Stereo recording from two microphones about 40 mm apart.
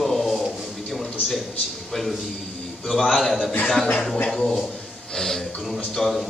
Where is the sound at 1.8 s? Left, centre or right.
Centre.